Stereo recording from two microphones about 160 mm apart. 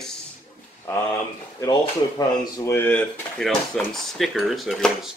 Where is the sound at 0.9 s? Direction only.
20° left (ahead or behind).